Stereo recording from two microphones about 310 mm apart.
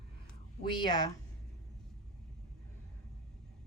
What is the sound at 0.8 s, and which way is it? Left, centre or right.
Speech, centre.